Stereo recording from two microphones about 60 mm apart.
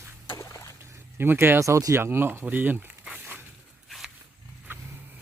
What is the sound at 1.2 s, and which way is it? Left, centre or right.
Speech, right.